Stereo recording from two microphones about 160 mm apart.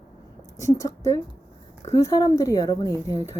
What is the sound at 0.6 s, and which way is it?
A woman's voice, 20° left (ahead or behind).